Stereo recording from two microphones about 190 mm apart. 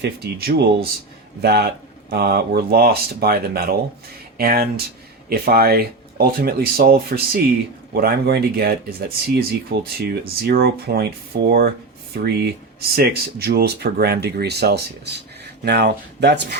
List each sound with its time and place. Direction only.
0.0 s speech: 55° right (ahead or behind)